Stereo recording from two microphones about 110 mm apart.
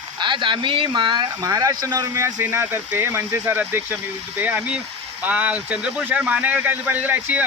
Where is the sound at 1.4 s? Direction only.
35° right (ahead or behind).